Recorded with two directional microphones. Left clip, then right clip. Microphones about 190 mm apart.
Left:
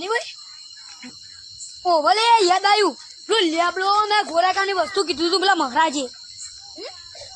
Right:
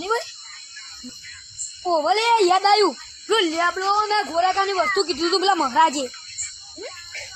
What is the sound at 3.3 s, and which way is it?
Speech, 25° left (ahead or behind).